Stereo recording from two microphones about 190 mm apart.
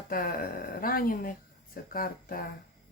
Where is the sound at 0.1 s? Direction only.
50° left (ahead or behind).